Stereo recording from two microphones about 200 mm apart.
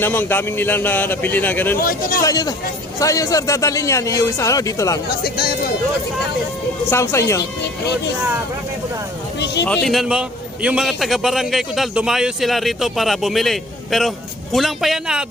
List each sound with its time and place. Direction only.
0.0 s speech: 10° left (ahead or behind)
1.8 s a man's voice: 45° left (ahead or behind)
2.2 s speech: 20° left (ahead or behind)
6.9 s speech: 15° left (ahead or behind)
9.6 s a man's voice: centre (ahead or behind)